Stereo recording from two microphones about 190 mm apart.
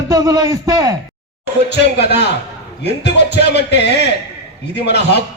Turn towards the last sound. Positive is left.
turn(degrees=60)  # may be behind; listen again after turning